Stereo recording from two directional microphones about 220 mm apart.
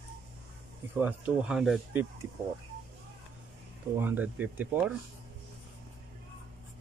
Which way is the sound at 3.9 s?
10° right (ahead or behind).